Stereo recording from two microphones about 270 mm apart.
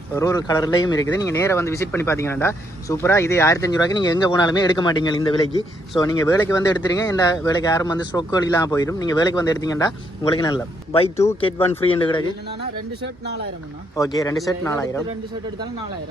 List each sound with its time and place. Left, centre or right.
0.1 s speech: centre
13.0 s speech: right
13.9 s speech: centre
14.3 s speech: centre